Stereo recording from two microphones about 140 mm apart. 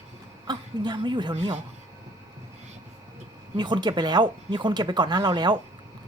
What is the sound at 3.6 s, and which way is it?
Speech, 30° right (ahead or behind).